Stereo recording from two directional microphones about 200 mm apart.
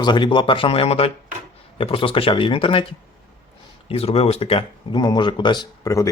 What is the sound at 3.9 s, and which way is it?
Speech, 30° left (ahead or behind).